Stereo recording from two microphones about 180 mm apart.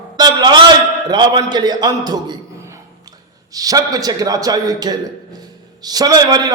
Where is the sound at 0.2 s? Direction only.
20° right (ahead or behind).